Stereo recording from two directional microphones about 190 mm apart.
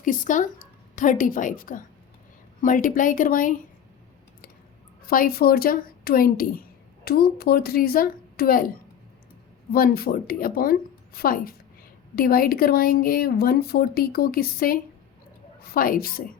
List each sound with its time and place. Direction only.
0.0 s a woman's voice: 45° left (ahead or behind)
5.0 s a woman's voice: 50° left (ahead or behind)
9.7 s a woman's voice: 50° left (ahead or behind)